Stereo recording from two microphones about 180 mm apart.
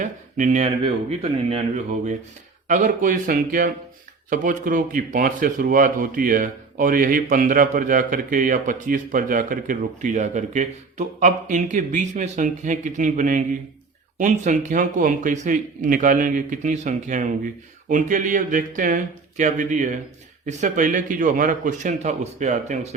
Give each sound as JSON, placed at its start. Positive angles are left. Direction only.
{"t": 0.0, "sound": "speech", "side_deg": -45}